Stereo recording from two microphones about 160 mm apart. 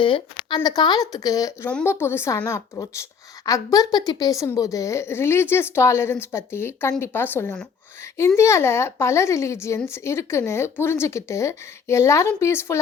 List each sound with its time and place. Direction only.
0.0 s a woman's voice: 30° left (ahead or behind)